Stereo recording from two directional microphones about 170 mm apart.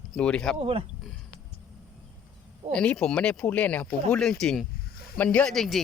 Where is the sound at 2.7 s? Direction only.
5° left (ahead or behind).